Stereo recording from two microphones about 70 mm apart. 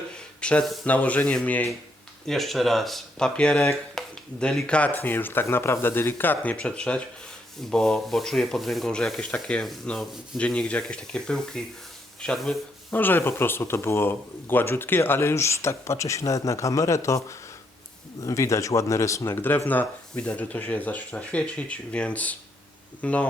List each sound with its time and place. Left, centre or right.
0.4 s a sound: centre
0.9 s speech: left
2.2 s speech: centre
5.0 s speech: left; by 11.6 s centre
12.9 s speech: left
19.4 s speech: left